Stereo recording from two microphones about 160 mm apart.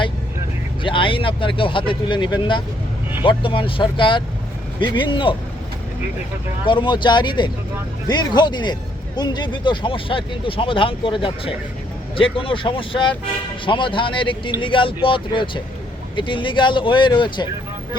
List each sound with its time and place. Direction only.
0.8 s speech: 30° left (ahead or behind)
6.7 s speech: 30° left (ahead or behind)